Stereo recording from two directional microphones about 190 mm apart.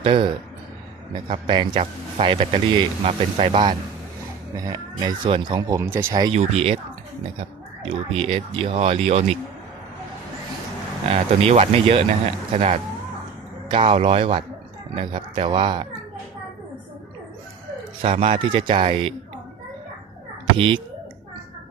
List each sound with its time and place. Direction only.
0.0 s speech: 30° right (ahead or behind)
1.5 s speech: 25° right (ahead or behind)
6.3 s speech: 35° right (ahead or behind)
7.9 s speech: 30° right (ahead or behind)
11.1 s speech: 35° right (ahead or behind)
18.0 s speech: 30° right (ahead or behind)
20.6 s speech: 25° right (ahead or behind)